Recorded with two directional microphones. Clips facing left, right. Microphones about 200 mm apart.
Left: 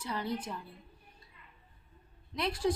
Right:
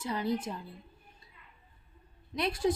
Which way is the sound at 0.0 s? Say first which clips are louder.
Right 4 dB; 25° right (ahead or behind).